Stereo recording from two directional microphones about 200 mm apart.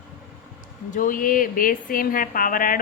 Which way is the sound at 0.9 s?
40° left (ahead or behind).